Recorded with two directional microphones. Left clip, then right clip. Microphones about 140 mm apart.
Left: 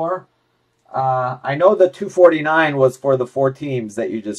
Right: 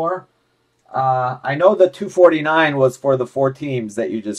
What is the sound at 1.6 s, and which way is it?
Speech, 15° right (ahead or behind).